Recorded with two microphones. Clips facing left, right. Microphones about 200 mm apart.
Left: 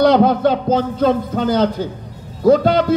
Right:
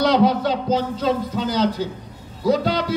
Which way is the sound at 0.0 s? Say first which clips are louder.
Left 5 dB; 50° left (ahead or behind).